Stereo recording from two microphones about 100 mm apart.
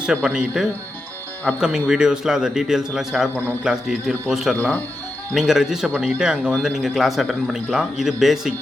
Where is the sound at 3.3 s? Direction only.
20° right (ahead or behind).